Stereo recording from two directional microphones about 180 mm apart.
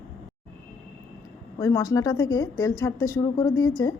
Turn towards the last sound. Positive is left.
turn(degrees=20)  # may be behind; listen again after turning